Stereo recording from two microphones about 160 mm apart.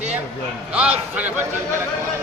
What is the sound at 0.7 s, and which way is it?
A man's voice, 5° right (ahead or behind).